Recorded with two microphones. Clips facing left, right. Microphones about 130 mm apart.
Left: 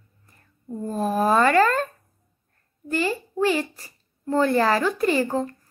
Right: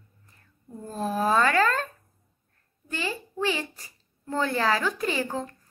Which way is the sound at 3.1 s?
40° left (ahead or behind).